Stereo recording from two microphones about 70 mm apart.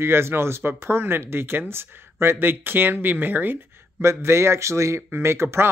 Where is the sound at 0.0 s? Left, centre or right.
Right.